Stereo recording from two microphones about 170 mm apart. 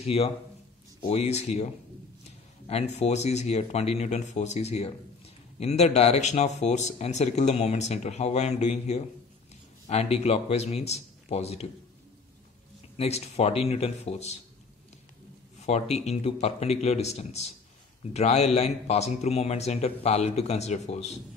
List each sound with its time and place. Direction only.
0.0 s speech: 35° left (ahead or behind)
12.9 s speech: 35° left (ahead or behind)
15.6 s speech: 40° left (ahead or behind)